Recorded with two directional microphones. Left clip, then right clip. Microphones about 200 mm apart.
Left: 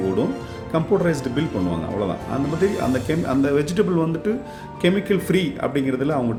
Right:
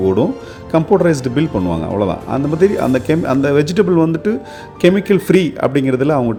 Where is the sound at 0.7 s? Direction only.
40° right (ahead or behind).